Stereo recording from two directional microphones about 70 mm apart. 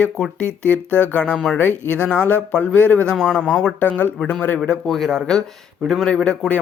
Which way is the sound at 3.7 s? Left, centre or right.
Left.